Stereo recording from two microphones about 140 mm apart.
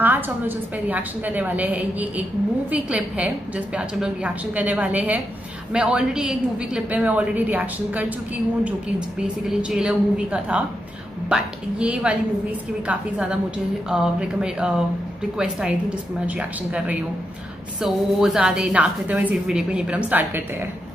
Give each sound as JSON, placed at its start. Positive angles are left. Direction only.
{"t": 0.0, "sound": "a woman's voice", "side_deg": -15}
{"t": 9.5, "sound": "a woman's voice", "side_deg": -5}